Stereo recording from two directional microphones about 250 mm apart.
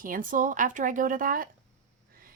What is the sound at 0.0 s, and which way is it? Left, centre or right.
Speech, right.